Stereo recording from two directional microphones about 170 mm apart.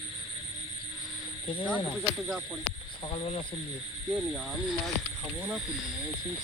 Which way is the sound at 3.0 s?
35° left (ahead or behind).